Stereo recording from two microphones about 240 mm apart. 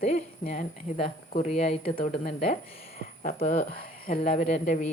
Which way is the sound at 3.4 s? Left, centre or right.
Left.